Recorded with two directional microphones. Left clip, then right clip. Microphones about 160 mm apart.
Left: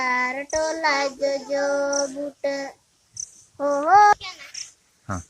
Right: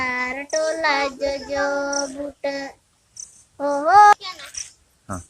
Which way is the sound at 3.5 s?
40° left (ahead or behind).